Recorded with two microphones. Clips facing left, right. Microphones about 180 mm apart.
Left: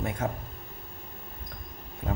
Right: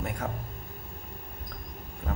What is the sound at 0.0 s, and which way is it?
Air conditioning, 20° left (ahead or behind).